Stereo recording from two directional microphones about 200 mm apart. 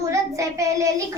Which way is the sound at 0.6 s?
15° right (ahead or behind).